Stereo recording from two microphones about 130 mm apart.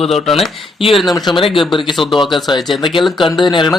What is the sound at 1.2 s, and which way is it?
Speech, 35° left (ahead or behind).